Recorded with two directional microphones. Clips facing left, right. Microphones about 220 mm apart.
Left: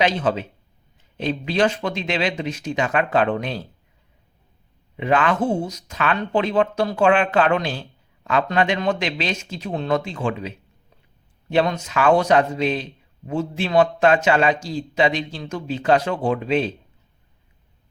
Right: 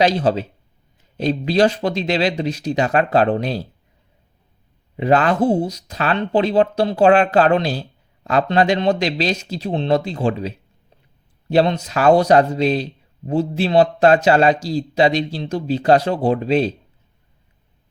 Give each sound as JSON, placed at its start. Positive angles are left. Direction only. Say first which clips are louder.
{"t": 0.0, "sound": "speech", "louder": "right 4 dB", "side_deg": -35}
{"t": 4.9, "sound": "speech", "louder": "right 4 dB", "side_deg": -35}